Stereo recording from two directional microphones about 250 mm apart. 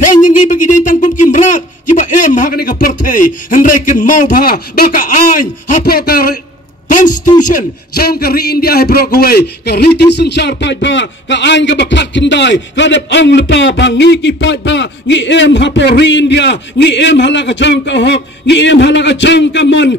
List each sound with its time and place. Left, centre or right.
0.0 s a sound: left
1.2 s a man's voice: left
7.5 s a man's voice: left